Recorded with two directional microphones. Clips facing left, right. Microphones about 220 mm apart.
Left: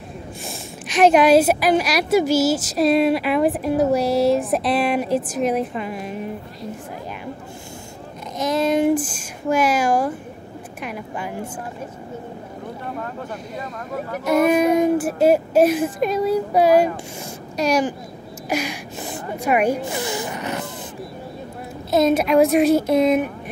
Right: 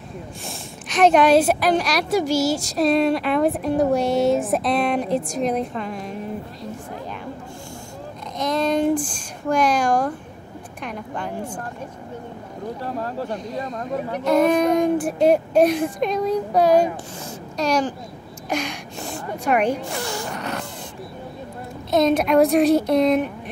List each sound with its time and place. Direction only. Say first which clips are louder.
0.5 s a woman's voice: left 2 dB; 5° left (ahead or behind)
8.4 s a woman's voice: left 2 dB; 5° left (ahead or behind)
12.8 s speech: right 3 dB; 30° right (ahead or behind)
14.1 s speech: left 1 dB; 5° left (ahead or behind)
18.5 s gasp: left 2 dB; 5° left (ahead or behind)
19.4 s speech: left 1 dB; 5° left (ahead or behind)
20.2 s music: left 2 dB; 5° left (ahead or behind)
21.9 s a woman's voice: left 1 dB; centre (ahead or behind)